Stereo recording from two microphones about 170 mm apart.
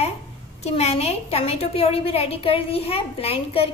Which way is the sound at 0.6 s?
40° left (ahead or behind).